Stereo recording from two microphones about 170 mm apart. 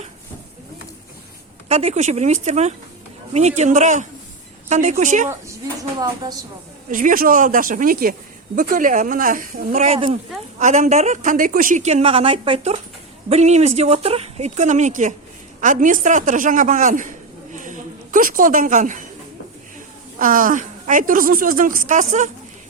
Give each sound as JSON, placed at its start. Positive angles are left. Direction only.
{"t": 1.6, "sound": "a woman's voice", "side_deg": -40}
{"t": 6.2, "sound": "a woman's voice", "side_deg": -20}
{"t": 6.9, "sound": "a woman's voice", "side_deg": -55}
{"t": 20.1, "sound": "a woman's voice", "side_deg": -55}